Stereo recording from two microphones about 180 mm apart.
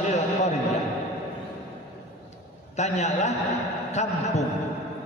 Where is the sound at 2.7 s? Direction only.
40° left (ahead or behind).